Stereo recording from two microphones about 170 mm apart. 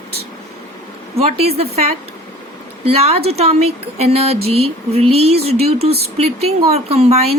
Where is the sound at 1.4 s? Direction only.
35° right (ahead or behind).